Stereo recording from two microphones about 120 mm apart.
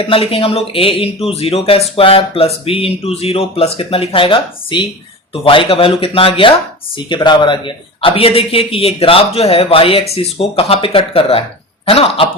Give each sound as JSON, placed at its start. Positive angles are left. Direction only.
{"t": 0.1, "sound": "speech", "side_deg": 50}